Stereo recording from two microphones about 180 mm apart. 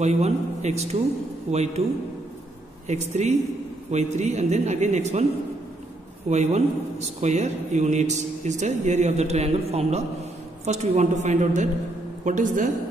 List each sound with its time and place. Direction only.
0.0 s a man's voice: 40° right (ahead or behind)
2.9 s a man's voice: 40° right (ahead or behind)
6.2 s a man's voice: 40° right (ahead or behind)